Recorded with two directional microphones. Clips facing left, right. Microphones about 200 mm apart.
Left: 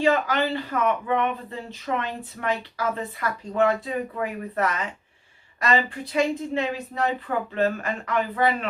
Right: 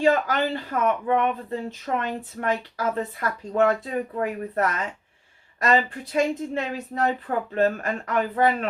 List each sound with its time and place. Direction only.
0.0 s speech: 45° right (ahead or behind)